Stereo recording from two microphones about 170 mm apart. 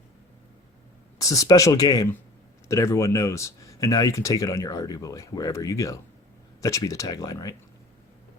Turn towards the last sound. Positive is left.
turn(degrees=20)  # may be behind; listen again after turning